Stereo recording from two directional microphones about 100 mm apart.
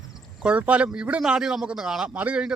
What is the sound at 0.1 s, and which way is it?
A man's voice, 10° right (ahead or behind).